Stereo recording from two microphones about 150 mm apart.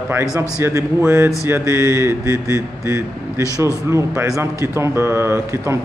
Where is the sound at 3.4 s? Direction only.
20° left (ahead or behind).